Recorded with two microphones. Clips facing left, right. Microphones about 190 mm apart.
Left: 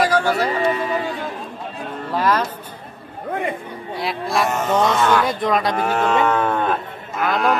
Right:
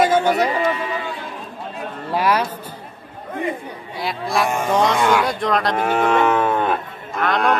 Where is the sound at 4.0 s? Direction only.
Centre (ahead or behind).